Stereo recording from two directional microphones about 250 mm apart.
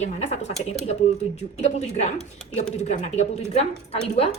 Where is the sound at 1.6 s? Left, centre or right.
Left.